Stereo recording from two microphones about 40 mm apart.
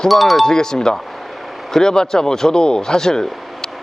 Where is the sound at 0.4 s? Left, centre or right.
Centre.